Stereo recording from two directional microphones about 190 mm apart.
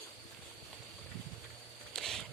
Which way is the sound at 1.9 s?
Centre (ahead or behind).